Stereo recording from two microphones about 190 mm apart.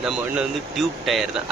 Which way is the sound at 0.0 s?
Centre (ahead or behind).